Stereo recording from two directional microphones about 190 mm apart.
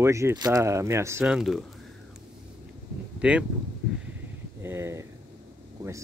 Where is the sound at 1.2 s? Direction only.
5° right (ahead or behind).